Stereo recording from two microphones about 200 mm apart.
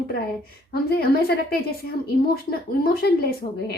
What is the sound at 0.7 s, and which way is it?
A woman's voice, 50° left (ahead or behind).